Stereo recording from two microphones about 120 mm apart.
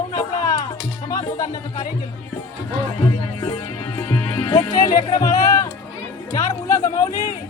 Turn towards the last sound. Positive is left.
turn(degrees=25)  # may be behind; listen again after turning